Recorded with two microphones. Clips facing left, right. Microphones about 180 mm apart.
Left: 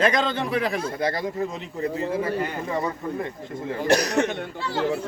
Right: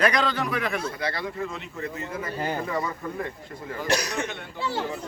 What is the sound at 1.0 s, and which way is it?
Speech, 45° left (ahead or behind).